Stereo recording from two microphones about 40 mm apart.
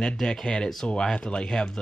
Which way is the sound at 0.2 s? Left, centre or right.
Centre.